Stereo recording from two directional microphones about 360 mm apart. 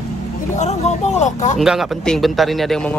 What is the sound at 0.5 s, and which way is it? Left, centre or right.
Speech, centre.